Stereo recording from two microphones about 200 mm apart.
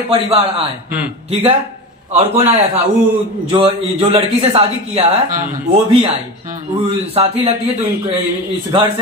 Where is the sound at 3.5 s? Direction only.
25° right (ahead or behind).